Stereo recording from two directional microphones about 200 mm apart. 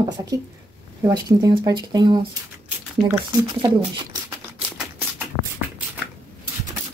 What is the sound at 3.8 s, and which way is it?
Speech, 25° right (ahead or behind).